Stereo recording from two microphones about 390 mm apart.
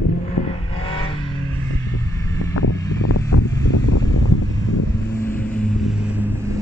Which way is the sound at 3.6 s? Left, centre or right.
Left.